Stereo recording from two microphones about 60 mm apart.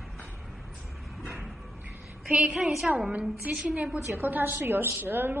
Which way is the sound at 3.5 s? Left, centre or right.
Right.